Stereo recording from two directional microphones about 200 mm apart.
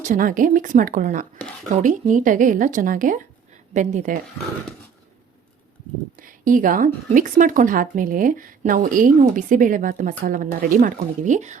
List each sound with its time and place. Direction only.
0.0 s speech: 40° right (ahead or behind)
6.1 s speech: 40° right (ahead or behind)